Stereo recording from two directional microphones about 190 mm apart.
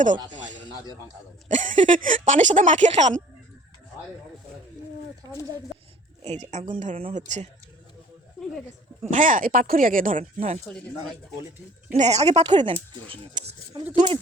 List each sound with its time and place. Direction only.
1.5 s speech: 40° right (ahead or behind)
6.2 s speech: 35° right (ahead or behind)
9.0 s speech: 45° right (ahead or behind)
11.9 s speech: 35° right (ahead or behind)